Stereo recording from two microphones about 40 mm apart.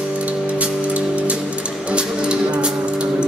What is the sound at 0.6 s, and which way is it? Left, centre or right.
Music, right.